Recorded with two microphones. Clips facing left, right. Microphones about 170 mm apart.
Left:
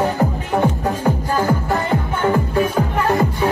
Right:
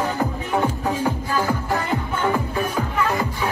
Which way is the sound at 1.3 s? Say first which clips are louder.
Left 6 dB; 40° left (ahead or behind).